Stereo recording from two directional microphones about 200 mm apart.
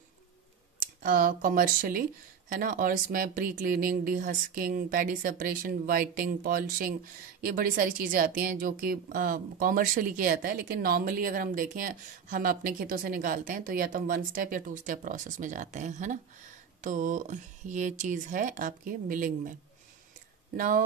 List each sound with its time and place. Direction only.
0.7 s a woman's voice: 45° right (ahead or behind)
20.5 s a woman's voice: 45° right (ahead or behind)